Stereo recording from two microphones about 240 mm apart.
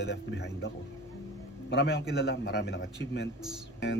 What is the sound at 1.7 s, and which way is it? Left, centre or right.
A man's voice, left.